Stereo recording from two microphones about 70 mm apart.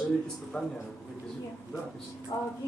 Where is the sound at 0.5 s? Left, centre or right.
Centre.